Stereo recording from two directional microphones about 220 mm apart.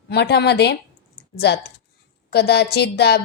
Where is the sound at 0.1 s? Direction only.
50° left (ahead or behind).